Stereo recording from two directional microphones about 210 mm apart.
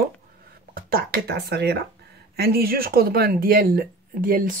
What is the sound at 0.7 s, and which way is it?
Speech, 45° right (ahead or behind).